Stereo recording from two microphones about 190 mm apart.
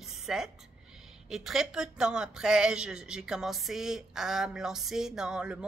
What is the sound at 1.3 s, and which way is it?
Speech, centre (ahead or behind).